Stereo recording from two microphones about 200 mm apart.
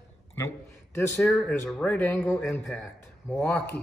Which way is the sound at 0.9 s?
10° left (ahead or behind).